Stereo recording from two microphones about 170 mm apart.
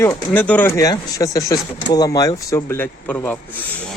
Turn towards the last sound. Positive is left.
turn(degrees=10)  # may be behind; listen again after turning